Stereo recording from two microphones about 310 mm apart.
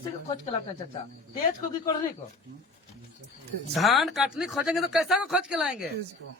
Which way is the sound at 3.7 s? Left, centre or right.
Centre.